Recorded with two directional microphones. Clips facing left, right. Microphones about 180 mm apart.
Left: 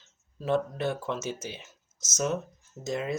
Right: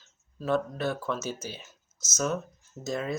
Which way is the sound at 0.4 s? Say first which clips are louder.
Even; 20° left (ahead or behind).